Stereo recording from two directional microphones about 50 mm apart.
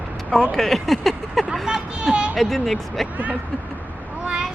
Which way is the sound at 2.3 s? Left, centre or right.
Centre.